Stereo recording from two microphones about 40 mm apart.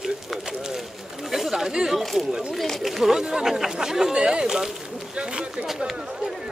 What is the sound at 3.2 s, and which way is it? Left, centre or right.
Chatter, centre.